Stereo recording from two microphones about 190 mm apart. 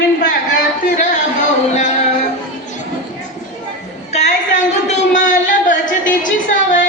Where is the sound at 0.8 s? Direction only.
40° left (ahead or behind).